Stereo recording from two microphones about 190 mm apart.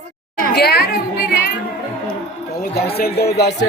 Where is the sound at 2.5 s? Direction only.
55° left (ahead or behind).